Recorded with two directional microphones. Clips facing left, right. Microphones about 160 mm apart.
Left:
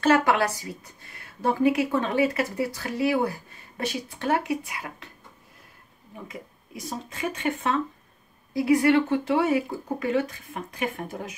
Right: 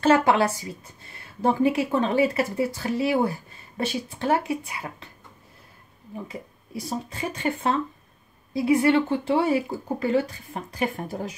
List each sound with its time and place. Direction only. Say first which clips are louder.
0.0 s a woman's voice: right 2 dB; 25° right (ahead or behind)
6.2 s speech: right 2 dB; 35° right (ahead or behind)